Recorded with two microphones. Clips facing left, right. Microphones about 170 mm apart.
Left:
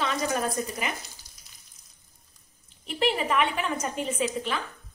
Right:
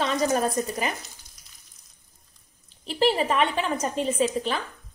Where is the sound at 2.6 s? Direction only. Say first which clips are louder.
Right 4 dB; 35° right (ahead or behind).